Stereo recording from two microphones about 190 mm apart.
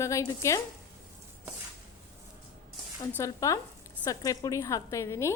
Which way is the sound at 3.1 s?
15° left (ahead or behind).